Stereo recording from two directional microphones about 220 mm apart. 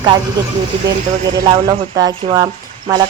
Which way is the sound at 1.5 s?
15° right (ahead or behind).